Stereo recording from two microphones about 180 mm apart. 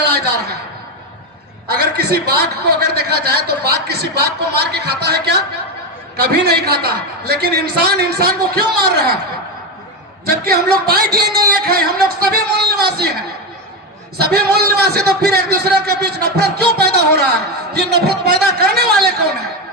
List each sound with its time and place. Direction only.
1.7 s a man's voice: 60° right (ahead or behind)
10.2 s a man's voice: 60° right (ahead or behind)